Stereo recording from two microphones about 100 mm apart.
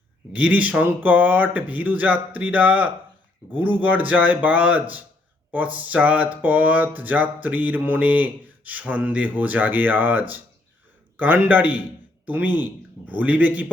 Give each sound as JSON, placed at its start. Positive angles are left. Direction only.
{"t": 0.3, "sound": "a man's voice", "side_deg": -15}